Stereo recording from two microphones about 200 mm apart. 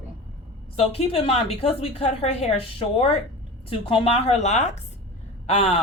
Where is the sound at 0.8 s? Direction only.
30° left (ahead or behind).